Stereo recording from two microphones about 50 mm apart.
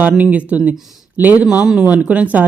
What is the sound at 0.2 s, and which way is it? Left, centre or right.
Speech, right.